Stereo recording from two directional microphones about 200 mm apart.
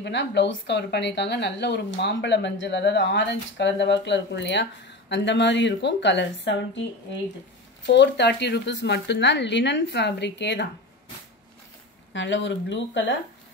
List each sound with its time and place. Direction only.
0.0 s speech: 60° left (ahead or behind)
7.8 s speech: 60° left (ahead or behind)
12.1 s speech: 65° left (ahead or behind)